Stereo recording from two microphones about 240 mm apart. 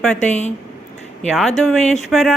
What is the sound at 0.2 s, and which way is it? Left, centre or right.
Speech, left.